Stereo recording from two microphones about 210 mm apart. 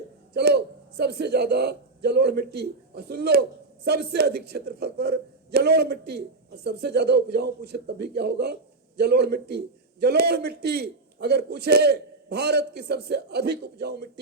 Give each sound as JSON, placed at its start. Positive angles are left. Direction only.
{"t": 0.3, "sound": "a man's voice", "side_deg": -50}